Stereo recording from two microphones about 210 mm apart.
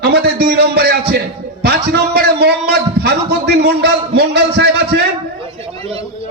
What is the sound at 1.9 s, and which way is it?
A man's voice, 50° right (ahead or behind).